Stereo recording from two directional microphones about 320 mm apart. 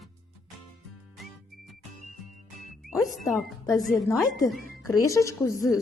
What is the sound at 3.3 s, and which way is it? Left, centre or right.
A woman's voice, centre.